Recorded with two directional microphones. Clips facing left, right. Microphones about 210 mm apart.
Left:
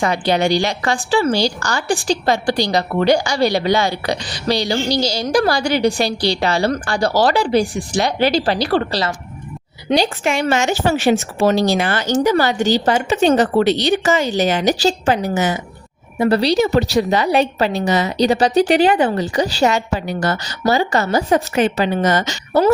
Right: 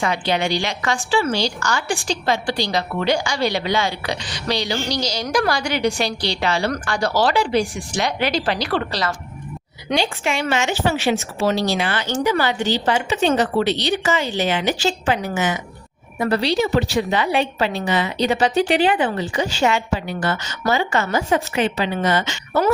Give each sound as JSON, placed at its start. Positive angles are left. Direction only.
{"t": 0.0, "sound": "a woman's voice", "side_deg": 40}
{"t": 9.9, "sound": "a woman's voice", "side_deg": 40}